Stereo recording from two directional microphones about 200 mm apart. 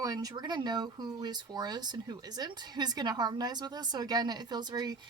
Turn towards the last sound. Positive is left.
turn(degrees=-20)  # may be behind; listen again after turning